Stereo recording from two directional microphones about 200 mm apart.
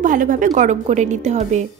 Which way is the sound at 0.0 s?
40° right (ahead or behind).